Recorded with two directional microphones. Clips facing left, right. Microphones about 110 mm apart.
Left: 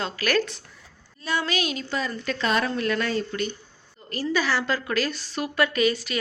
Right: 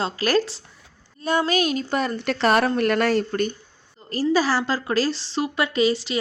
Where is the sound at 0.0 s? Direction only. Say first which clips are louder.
Right 3 dB; 30° right (ahead or behind).